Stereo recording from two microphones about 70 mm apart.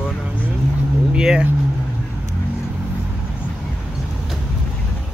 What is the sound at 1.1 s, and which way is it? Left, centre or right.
Speech, centre.